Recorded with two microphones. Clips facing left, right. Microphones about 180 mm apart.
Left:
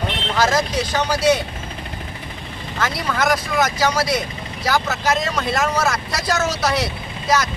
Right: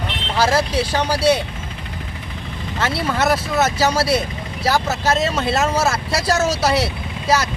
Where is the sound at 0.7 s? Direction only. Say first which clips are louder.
Right 2 dB; 30° right (ahead or behind).